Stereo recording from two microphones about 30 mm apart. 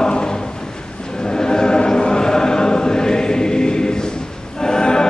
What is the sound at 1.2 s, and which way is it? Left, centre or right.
Chant, left.